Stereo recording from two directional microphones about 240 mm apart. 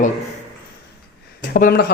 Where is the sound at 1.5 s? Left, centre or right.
Left.